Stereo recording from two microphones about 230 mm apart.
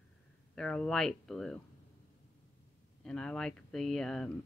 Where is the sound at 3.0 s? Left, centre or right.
Centre.